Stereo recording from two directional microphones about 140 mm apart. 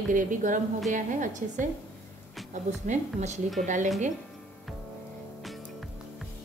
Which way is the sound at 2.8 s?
55° right (ahead or behind).